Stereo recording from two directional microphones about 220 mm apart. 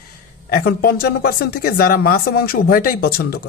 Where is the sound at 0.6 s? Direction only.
45° left (ahead or behind).